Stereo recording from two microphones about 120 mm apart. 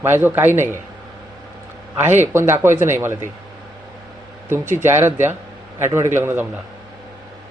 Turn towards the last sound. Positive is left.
turn(degrees=-20)  # may be behind; listen again after turning